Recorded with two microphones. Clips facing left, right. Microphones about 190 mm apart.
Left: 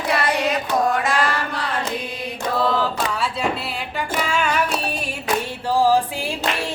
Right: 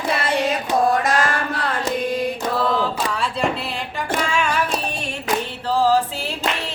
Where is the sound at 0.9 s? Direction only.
40° right (ahead or behind).